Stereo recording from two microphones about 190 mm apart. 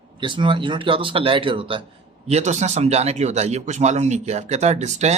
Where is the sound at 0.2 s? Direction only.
25° right (ahead or behind).